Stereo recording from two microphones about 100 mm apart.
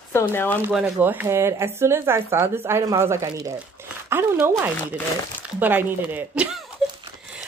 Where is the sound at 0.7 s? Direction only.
5° right (ahead or behind).